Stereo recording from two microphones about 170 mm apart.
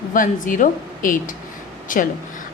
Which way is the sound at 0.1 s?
50° left (ahead or behind).